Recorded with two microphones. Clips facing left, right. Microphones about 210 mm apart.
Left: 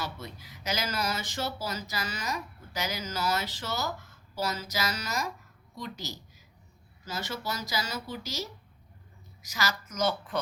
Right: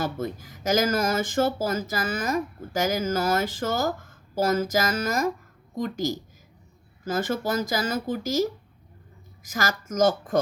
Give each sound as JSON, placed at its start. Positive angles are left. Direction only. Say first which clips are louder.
{"t": 0.0, "sound": "speech", "louder": "right 10 dB", "side_deg": -50}